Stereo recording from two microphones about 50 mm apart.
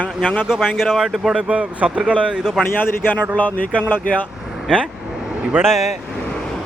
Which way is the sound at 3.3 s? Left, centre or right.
Left.